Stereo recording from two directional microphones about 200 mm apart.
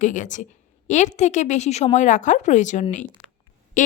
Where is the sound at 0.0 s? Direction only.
40° left (ahead or behind).